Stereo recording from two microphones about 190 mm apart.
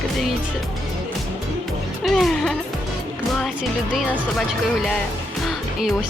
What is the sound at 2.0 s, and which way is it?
Music, centre (ahead or behind).